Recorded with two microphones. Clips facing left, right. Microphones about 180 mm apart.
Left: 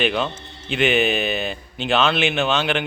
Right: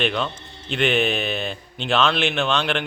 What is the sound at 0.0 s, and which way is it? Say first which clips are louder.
A man's voice: left 2 dB; 5° left (ahead or behind).